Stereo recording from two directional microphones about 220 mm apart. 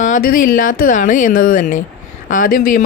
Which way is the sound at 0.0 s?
40° left (ahead or behind).